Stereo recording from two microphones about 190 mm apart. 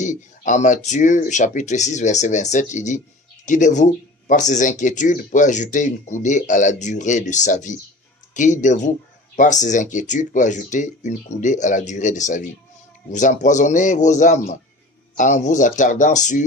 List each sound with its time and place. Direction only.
0.0 s speech: 40° left (ahead or behind)